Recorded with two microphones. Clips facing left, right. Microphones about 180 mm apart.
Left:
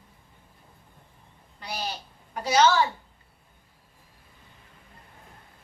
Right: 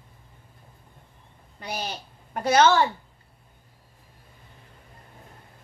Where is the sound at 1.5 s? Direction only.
50° right (ahead or behind).